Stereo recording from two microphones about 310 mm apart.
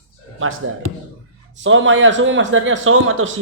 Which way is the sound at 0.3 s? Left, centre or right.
Right.